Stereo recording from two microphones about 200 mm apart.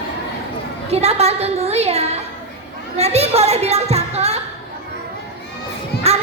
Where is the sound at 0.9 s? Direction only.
30° right (ahead or behind).